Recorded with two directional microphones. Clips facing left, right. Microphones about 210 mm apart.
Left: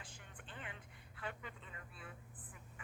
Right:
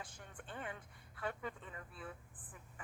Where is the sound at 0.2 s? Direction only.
45° right (ahead or behind).